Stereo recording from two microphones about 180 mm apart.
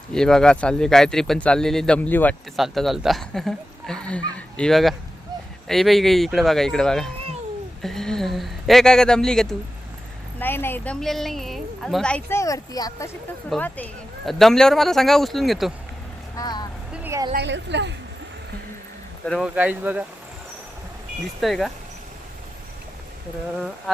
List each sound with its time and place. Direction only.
0.1 s speech: 5° left (ahead or behind)
11.0 s speech: centre (ahead or behind); by 13.1 s 20° left (ahead or behind)
13.5 s speech: 10° left (ahead or behind)
16.3 s vehicle: 20° left (ahead or behind)
16.9 s a sound: 15° right (ahead or behind)
17.3 s a woman's voice: 75° right (ahead or behind)
19.2 s speech: 5° left (ahead or behind)
19.5 s speech: 10° right (ahead or behind)
21.4 s speech: centre (ahead or behind)